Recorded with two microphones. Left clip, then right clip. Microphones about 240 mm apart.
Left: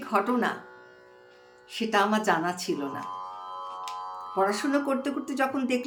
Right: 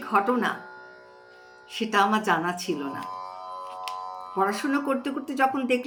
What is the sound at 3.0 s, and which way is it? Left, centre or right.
Music, right.